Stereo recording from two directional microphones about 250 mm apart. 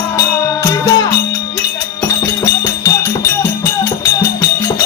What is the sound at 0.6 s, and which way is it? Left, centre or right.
Music, centre.